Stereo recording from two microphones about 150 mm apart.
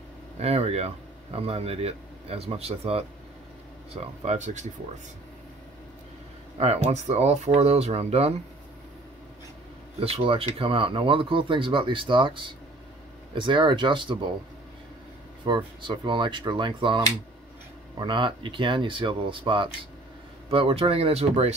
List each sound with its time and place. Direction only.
0.4 s speech: 45° right (ahead or behind)
6.6 s speech: 45° right (ahead or behind)
9.9 s speech: 40° right (ahead or behind)
15.4 s speech: 30° right (ahead or behind)